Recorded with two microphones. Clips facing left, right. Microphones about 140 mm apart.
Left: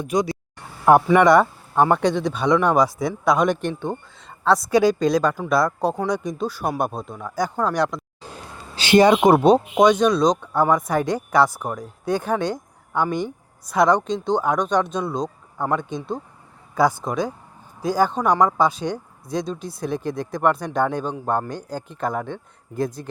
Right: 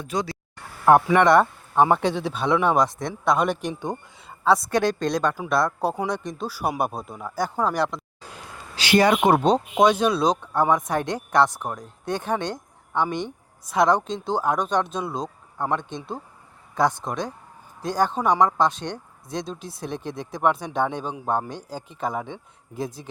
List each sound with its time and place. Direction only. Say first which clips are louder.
0.0 s speech: left 6 dB; 15° left (ahead or behind)
0.9 s speech: left 2 dB; 5° left (ahead or behind)
8.7 s speech: left 4 dB; 25° left (ahead or behind)
9.7 s speech: left 3 dB; 5° right (ahead or behind)